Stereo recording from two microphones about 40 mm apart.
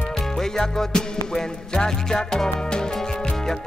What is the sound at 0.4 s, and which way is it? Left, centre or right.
Music, centre.